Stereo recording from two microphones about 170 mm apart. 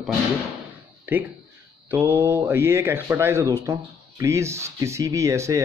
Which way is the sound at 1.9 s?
10° right (ahead or behind).